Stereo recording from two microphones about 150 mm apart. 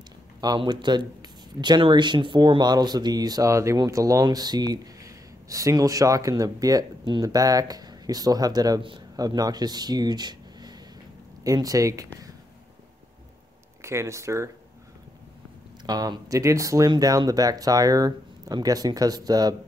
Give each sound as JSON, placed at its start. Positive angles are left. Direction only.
{"t": 0.4, "sound": "speech", "side_deg": -30}
{"t": 13.8, "sound": "speech", "side_deg": -20}
{"t": 15.8, "sound": "speech", "side_deg": -25}